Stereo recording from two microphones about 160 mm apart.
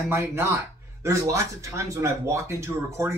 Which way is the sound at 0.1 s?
15° right (ahead or behind).